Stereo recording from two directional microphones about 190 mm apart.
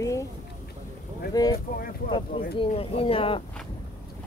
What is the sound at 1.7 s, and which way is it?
Speech, 50° left (ahead or behind).